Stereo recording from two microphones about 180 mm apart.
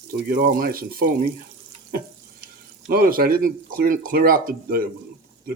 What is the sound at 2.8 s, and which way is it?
Speech, 50° right (ahead or behind).